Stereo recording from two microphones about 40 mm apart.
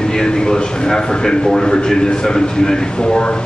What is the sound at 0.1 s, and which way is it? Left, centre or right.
A man's voice, centre.